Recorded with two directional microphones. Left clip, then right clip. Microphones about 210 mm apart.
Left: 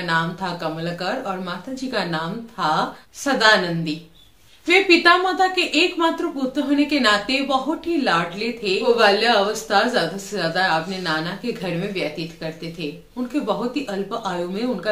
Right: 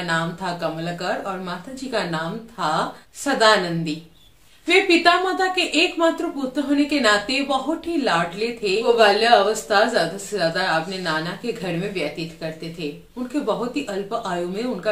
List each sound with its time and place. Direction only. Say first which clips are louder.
0.0 s a woman's voice: left 2 dB; centre (ahead or behind)
13.8 s a woman's voice: even; 5° left (ahead or behind)